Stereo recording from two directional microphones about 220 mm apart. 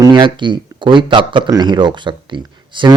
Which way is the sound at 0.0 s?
20° right (ahead or behind).